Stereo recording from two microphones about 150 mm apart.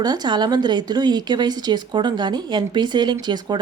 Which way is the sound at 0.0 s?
30° right (ahead or behind).